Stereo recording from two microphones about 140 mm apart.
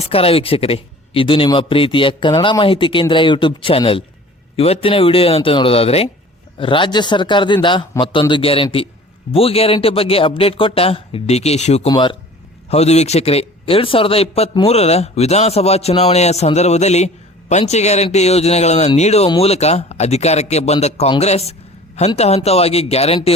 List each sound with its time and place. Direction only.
0.0 s speech: 45° left (ahead or behind)
11.9 s speech: 35° left (ahead or behind)
12.7 s speech: 50° left (ahead or behind)